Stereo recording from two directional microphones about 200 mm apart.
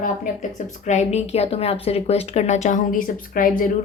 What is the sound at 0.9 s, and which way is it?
A woman's voice, 35° left (ahead or behind).